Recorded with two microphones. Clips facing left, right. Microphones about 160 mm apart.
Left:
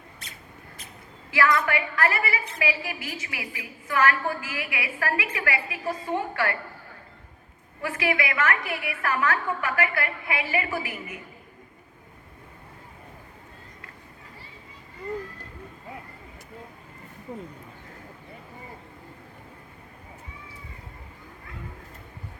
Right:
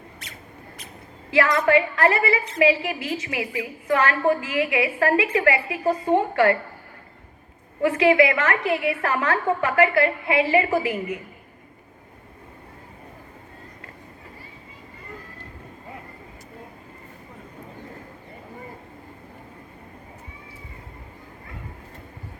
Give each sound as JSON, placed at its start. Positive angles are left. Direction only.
{"t": 1.3, "sound": "a woman's voice", "side_deg": -25}
{"t": 7.8, "sound": "a woman's voice", "side_deg": -25}